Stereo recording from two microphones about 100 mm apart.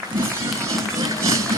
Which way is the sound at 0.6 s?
30° right (ahead or behind).